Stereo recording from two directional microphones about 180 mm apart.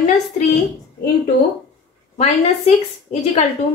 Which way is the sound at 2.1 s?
35° left (ahead or behind).